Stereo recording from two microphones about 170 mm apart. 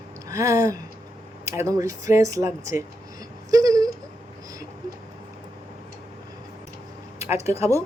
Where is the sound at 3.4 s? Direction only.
20° right (ahead or behind).